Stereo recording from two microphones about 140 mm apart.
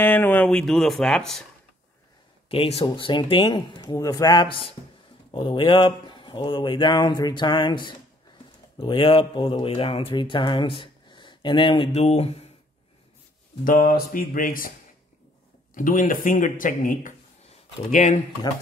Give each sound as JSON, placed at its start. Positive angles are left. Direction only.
{"t": 0.0, "sound": "speech", "side_deg": 15}
{"t": 2.5, "sound": "speech", "side_deg": 40}
{"t": 13.7, "sound": "a sound", "side_deg": 85}
{"t": 15.7, "sound": "speech", "side_deg": 70}
{"t": 17.9, "sound": "speech", "side_deg": 60}